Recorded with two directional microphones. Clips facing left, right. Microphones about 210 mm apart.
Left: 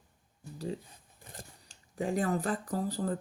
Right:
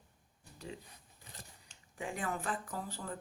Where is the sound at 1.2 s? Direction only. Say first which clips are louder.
Left 6 dB; 50° left (ahead or behind).